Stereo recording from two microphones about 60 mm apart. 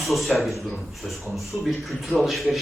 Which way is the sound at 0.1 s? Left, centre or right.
Centre.